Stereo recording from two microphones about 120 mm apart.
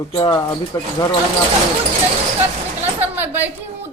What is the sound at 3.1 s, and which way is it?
Speech, 15° right (ahead or behind).